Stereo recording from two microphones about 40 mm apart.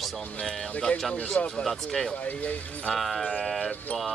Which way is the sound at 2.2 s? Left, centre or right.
Left.